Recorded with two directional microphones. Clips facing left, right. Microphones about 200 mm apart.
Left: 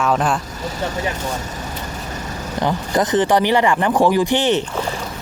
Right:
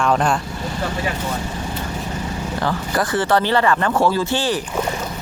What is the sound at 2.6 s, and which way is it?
Speech, 20° left (ahead or behind).